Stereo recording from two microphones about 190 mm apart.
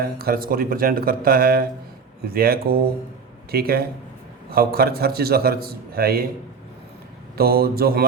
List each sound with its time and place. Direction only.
0.0 s a man's voice: 55° right (ahead or behind)
7.3 s a man's voice: 55° right (ahead or behind)